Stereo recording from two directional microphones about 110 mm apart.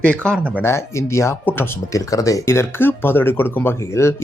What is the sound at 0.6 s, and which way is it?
Speech, 25° left (ahead or behind).